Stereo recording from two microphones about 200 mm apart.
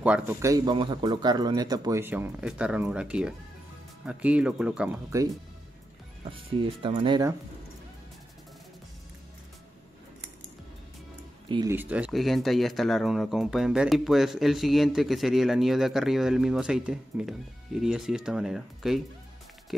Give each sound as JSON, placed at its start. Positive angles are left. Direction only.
{"t": 0.0, "sound": "speech", "side_deg": -10}
{"t": 6.5, "sound": "speech", "side_deg": -25}
{"t": 11.4, "sound": "speech", "side_deg": -25}
{"t": 11.7, "sound": "speech", "side_deg": -10}